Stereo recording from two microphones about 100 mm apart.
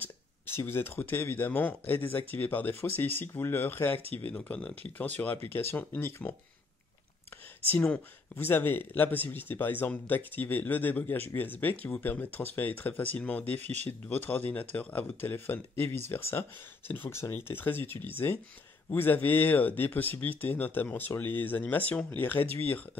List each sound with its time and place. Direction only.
0.0 s speech: 25° left (ahead or behind)
7.7 s speech: 20° left (ahead or behind)